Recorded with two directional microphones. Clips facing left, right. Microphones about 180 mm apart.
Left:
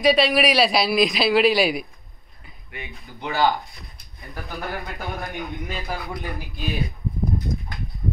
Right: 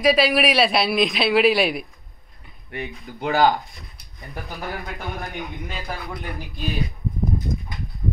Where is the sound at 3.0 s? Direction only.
55° right (ahead or behind).